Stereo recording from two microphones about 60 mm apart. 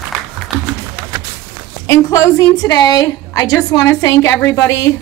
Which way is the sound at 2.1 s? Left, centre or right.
Left.